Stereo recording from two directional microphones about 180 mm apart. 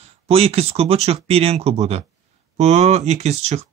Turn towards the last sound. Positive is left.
turn(degrees=-40)  # may be behind; listen again after turning